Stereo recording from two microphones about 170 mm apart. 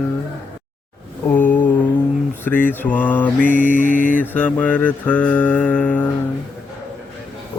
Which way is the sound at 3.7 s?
50° left (ahead or behind).